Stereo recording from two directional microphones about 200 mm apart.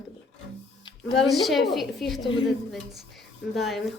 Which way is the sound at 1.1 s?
Centre (ahead or behind).